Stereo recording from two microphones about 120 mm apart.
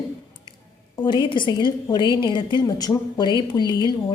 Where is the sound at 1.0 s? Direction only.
40° left (ahead or behind).